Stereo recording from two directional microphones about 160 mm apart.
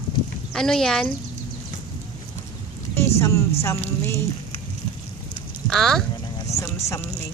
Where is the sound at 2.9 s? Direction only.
15° left (ahead or behind).